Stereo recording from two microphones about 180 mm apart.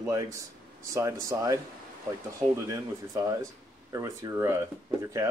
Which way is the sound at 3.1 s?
20° right (ahead or behind).